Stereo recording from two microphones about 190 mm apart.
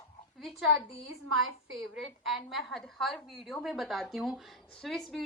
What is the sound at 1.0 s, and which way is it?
Speech, 90° right.